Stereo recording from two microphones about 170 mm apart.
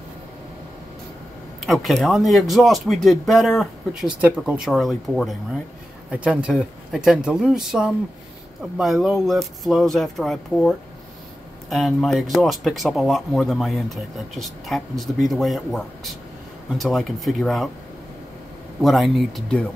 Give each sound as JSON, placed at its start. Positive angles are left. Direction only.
{"t": 1.7, "sound": "speech", "side_deg": 0}
{"t": 18.8, "sound": "speech", "side_deg": 0}